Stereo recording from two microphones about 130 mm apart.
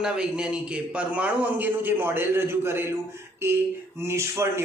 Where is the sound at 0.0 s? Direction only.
5° right (ahead or behind).